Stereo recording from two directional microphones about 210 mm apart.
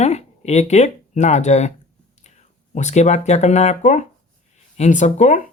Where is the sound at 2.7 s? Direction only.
35° left (ahead or behind).